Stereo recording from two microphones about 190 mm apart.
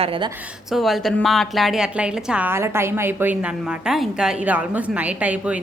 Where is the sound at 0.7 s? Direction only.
Centre (ahead or behind).